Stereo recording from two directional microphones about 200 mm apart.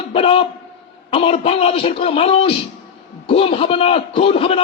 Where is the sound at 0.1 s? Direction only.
30° left (ahead or behind).